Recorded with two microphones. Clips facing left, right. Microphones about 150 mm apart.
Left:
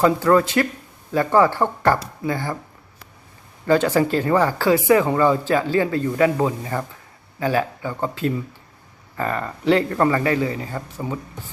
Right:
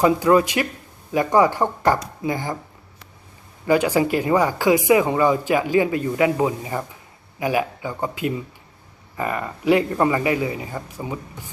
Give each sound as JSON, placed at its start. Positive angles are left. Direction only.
{"t": 0.0, "sound": "speech", "side_deg": -15}
{"t": 3.7, "sound": "speech", "side_deg": -10}